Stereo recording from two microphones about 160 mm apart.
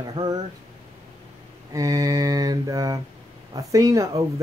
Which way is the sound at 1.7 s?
20° right (ahead or behind).